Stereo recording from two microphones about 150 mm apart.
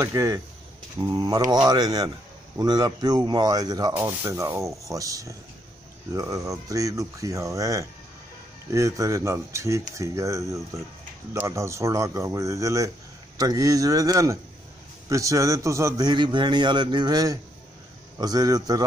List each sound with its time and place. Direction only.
0.0 s speech: 20° right (ahead or behind)
3.9 s speech: 15° right (ahead or behind)